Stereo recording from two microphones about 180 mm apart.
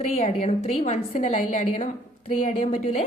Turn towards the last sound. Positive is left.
turn(degrees=35)  # may be behind; listen again after turning